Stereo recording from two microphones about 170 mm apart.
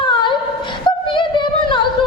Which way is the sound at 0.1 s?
30° left (ahead or behind).